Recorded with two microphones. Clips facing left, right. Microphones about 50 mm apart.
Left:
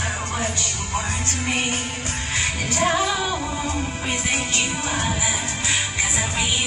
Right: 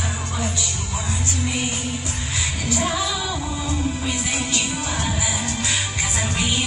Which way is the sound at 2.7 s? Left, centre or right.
Left.